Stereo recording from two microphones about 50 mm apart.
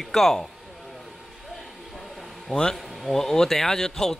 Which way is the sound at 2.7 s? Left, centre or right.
Centre.